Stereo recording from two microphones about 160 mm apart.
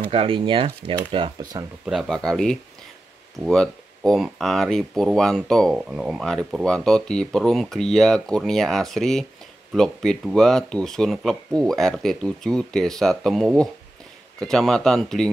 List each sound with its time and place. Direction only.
0.1 s speech: 35° right (ahead or behind)
1.9 s speech: centre (ahead or behind)